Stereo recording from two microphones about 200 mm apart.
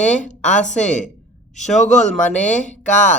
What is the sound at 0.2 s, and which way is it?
A woman's voice, 40° left (ahead or behind).